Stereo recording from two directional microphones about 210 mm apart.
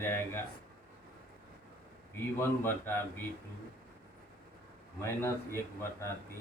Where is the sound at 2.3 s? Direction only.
10° left (ahead or behind).